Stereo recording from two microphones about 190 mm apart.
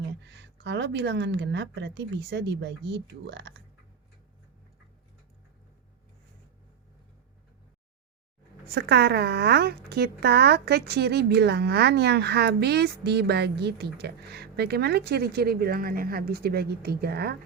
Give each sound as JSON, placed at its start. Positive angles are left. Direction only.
{"t": 0.3, "sound": "a woman's voice", "side_deg": -65}
{"t": 8.7, "sound": "a woman's voice", "side_deg": -60}